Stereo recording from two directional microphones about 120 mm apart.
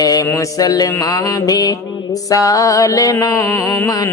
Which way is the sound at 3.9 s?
30° left (ahead or behind).